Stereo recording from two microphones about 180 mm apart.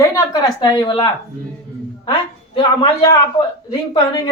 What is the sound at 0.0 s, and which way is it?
A woman's voice, 20° left (ahead or behind).